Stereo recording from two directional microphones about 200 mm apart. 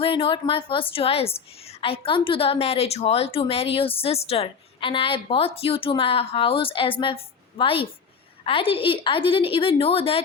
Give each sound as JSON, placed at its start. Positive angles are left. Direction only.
{"t": 0.0, "sound": "a woman's voice", "side_deg": 25}